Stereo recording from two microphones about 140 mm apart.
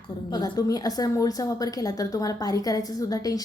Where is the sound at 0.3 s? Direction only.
30° left (ahead or behind).